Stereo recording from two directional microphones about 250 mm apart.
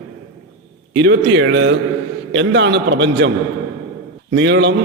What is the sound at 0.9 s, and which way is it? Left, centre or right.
A man's voice, right.